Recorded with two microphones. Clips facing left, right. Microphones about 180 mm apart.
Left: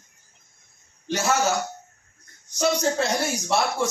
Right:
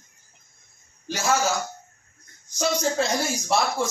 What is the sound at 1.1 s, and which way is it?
Speech, 70° left (ahead or behind).